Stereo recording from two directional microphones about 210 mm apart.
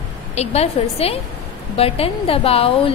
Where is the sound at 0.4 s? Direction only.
30° left (ahead or behind).